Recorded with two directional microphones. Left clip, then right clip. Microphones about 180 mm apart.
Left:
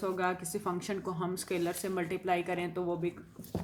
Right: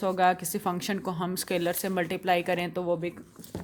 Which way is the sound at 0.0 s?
55° right (ahead or behind).